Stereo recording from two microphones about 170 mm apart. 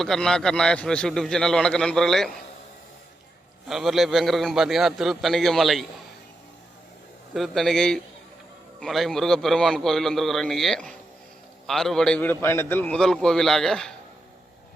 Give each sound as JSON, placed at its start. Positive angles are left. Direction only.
{"t": 0.0, "sound": "a man's voice", "side_deg": 5}
{"t": 3.7, "sound": "a man's voice", "side_deg": 0}
{"t": 7.3, "sound": "a man's voice", "side_deg": 0}